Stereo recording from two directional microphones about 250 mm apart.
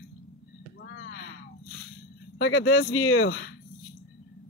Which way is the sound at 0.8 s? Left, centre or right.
Left.